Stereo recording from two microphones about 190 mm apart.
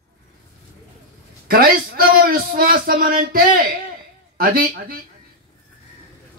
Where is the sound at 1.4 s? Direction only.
50° right (ahead or behind).